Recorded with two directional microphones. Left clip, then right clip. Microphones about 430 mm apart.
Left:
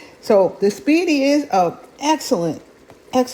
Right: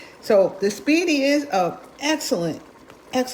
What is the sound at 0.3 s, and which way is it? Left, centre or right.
A woman's voice, centre.